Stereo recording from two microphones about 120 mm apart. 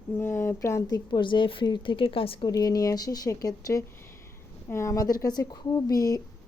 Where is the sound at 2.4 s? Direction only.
30° left (ahead or behind).